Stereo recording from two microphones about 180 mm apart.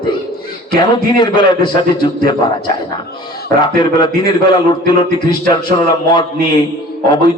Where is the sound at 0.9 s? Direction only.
25° left (ahead or behind).